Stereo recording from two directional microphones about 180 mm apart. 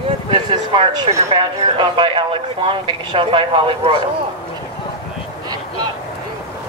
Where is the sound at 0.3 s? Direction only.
30° right (ahead or behind).